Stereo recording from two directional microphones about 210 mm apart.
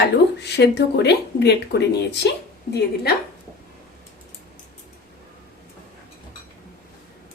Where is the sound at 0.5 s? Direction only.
50° left (ahead or behind).